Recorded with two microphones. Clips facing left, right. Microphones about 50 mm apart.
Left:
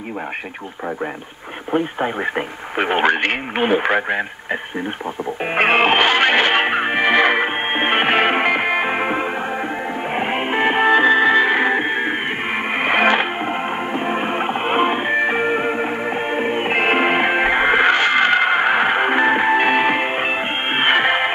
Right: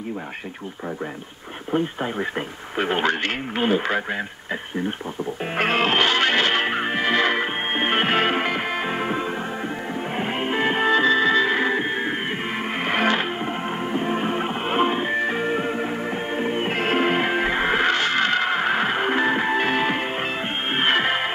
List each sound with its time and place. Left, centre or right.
1.7 s speech: left
5.4 s music: left